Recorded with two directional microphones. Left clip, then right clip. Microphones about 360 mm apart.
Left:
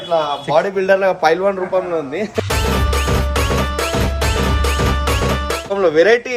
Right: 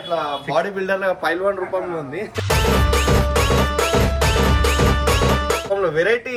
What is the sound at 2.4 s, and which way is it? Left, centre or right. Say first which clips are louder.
Music: right 1 dB; centre.